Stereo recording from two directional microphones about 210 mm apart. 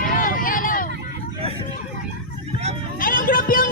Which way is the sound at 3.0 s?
40° left (ahead or behind).